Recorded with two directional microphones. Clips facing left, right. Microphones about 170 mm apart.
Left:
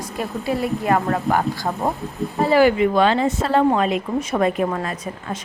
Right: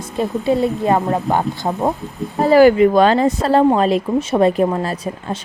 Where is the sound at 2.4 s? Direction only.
40° right (ahead or behind).